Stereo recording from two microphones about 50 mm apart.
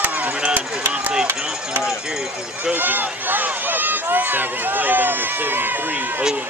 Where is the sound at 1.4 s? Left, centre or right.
Centre.